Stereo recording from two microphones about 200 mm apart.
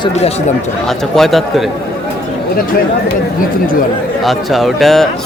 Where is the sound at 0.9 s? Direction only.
Centre (ahead or behind).